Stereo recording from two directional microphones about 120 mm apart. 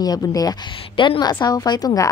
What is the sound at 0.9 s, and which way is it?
A woman's voice, 45° left (ahead or behind).